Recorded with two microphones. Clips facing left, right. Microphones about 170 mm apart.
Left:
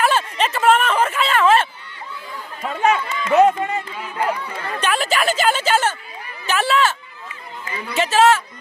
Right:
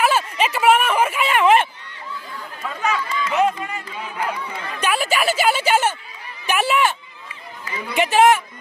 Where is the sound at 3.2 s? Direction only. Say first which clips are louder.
Left 7 dB; 30° left (ahead or behind).